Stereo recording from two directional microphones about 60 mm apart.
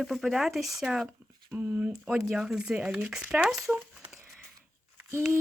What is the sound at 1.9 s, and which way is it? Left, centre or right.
Speech, centre.